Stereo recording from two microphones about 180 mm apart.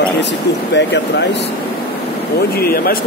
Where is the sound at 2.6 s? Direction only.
55° left (ahead or behind).